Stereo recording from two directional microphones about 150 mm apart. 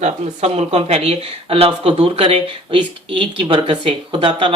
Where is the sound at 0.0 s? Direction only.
45° right (ahead or behind).